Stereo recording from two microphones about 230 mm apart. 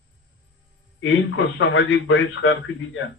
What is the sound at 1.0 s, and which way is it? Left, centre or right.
A man's voice, left.